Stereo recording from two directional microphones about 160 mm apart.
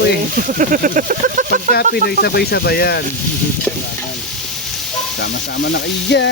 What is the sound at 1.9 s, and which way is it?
Speech, 85° left.